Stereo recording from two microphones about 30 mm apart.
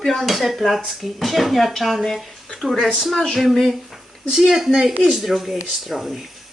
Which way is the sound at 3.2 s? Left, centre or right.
Centre.